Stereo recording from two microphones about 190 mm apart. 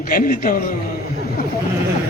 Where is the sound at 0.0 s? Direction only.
45° left (ahead or behind).